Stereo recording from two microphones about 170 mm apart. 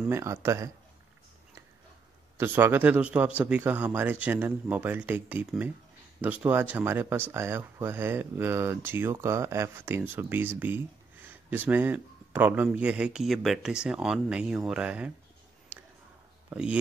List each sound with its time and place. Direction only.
0.1 s speech: 15° right (ahead or behind)
2.3 s speech: 15° right (ahead or behind)
16.4 s speech: 5° right (ahead or behind)